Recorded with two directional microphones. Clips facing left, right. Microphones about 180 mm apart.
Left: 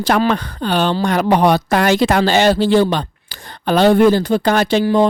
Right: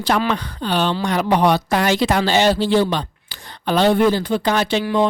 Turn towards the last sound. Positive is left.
turn(degrees=35)  # may be behind; listen again after turning